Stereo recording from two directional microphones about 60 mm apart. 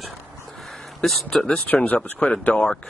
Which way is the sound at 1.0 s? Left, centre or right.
Centre.